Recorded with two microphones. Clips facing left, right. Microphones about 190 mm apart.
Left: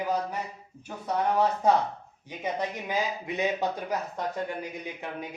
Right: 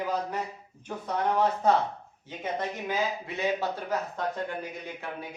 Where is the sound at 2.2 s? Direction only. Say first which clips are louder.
Left 1 dB; 15° left (ahead or behind).